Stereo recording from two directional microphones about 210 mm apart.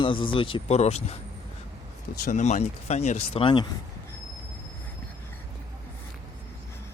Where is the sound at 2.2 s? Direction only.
35° left (ahead or behind).